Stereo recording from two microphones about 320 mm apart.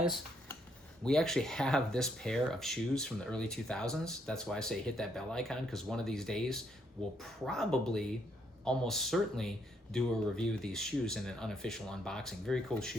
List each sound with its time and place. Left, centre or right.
1.0 s speech: centre